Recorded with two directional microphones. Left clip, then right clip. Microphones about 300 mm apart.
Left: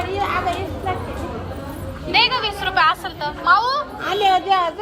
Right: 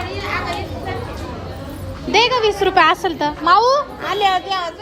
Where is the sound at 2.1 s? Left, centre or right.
Right.